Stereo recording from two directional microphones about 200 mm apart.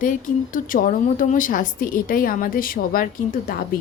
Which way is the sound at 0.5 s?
45° left (ahead or behind).